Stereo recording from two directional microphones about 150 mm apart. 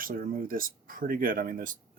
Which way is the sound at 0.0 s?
70° right (ahead or behind).